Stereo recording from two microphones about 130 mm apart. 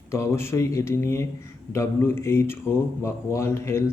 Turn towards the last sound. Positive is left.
turn(degrees=20)  # may be behind; listen again after turning